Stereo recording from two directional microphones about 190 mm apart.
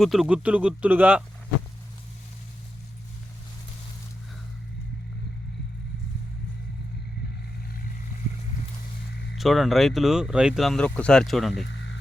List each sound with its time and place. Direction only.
0.0 s speech: centre (ahead or behind)
9.3 s speech: centre (ahead or behind)
11.7 s a sound: 70° left (ahead or behind)